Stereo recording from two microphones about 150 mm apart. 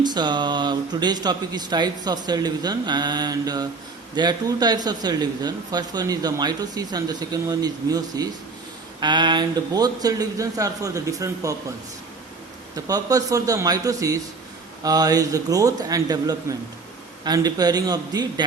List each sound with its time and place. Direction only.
0.0 s speech: 30° right (ahead or behind)
12.7 s speech: 25° right (ahead or behind)